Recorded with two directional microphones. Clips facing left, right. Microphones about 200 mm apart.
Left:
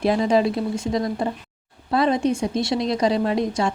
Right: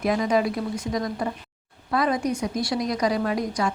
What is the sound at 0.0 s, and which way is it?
Speech, 30° left (ahead or behind).